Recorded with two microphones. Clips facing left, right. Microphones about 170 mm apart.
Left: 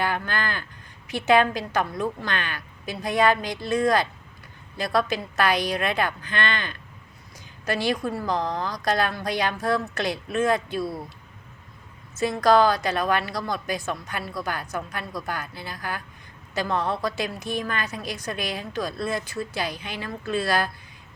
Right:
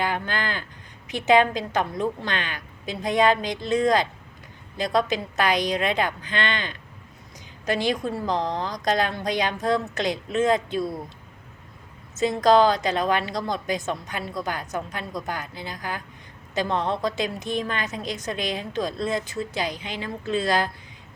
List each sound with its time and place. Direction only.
0.0 s a woman's voice: 20° right (ahead or behind)
12.1 s a woman's voice: 20° right (ahead or behind)